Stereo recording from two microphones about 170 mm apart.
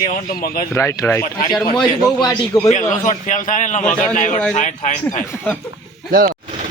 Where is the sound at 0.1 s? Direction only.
60° left (ahead or behind).